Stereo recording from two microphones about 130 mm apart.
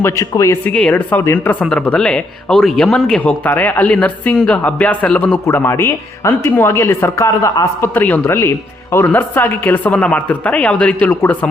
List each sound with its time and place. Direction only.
0.0 s speech: 25° left (ahead or behind)
0.7 s speech: 10° left (ahead or behind)